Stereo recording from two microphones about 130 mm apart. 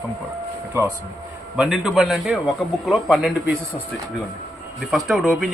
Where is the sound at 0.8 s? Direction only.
20° right (ahead or behind).